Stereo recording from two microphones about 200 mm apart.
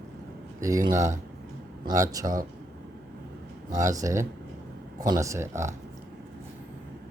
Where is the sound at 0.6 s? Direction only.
15° right (ahead or behind).